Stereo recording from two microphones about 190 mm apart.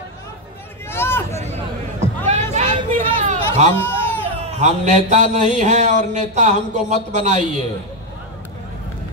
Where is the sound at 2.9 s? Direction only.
40° right (ahead or behind).